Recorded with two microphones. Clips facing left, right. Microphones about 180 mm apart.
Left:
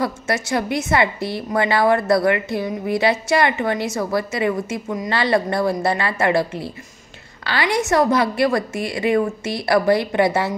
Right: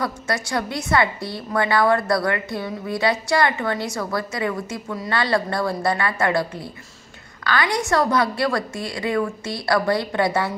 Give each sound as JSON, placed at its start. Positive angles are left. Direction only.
{"t": 0.0, "sound": "a woman's voice", "side_deg": 20}